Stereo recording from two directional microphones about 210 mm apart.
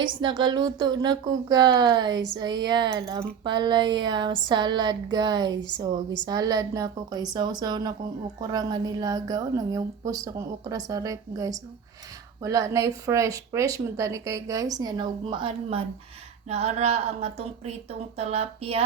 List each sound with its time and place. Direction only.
0.0 s speech: 20° right (ahead or behind)